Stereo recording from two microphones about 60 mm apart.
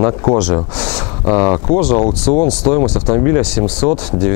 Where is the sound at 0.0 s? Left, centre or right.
Centre.